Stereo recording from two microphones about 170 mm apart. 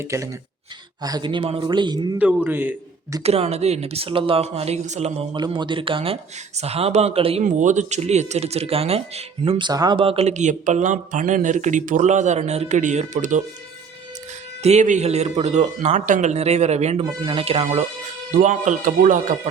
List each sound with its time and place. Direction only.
0.0 s a man's voice: 15° right (ahead or behind)
2.1 s a man's voice: 10° right (ahead or behind)
3.2 s speech: 40° right (ahead or behind)
5.3 s speech: 25° right (ahead or behind)
7.4 s speech: 45° right (ahead or behind)
14.6 s speech: 40° right (ahead or behind)
18.3 s speech: 50° right (ahead or behind)